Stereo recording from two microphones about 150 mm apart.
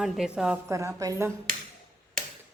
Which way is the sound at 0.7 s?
20° right (ahead or behind).